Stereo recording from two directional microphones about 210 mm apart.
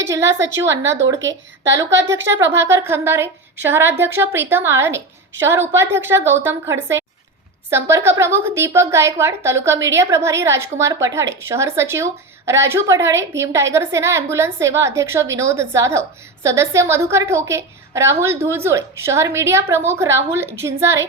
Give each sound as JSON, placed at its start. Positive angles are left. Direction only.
{"t": 0.1, "sound": "a woman's voice", "side_deg": -15}
{"t": 1.7, "sound": "a woman's voice", "side_deg": -60}
{"t": 2.5, "sound": "a woman's voice", "side_deg": -15}